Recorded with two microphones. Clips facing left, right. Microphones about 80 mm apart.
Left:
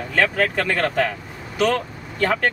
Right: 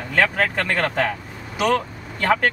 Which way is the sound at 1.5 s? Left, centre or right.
Centre.